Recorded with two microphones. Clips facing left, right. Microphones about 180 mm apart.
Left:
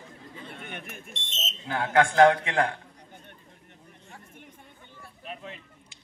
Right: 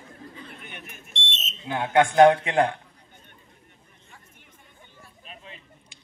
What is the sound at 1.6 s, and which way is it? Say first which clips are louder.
A man's voice: right 2 dB; 20° right (ahead or behind).